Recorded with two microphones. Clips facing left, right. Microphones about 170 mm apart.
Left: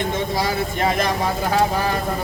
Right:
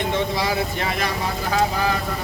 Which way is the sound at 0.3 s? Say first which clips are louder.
Left 1 dB; 45° left (ahead or behind).